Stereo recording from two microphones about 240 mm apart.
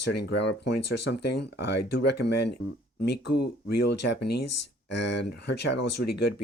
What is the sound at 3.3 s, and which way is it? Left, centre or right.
Speech, left.